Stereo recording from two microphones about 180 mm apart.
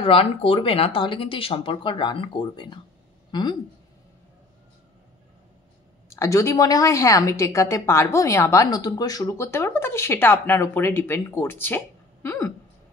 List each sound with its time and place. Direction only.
0.0 s speech: 30° left (ahead or behind)
6.0 s a woman's voice: 15° left (ahead or behind)